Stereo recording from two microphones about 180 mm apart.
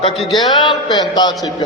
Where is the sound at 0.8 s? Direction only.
20° left (ahead or behind).